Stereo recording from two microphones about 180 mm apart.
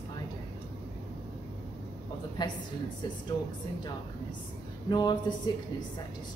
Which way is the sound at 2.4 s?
25° left (ahead or behind).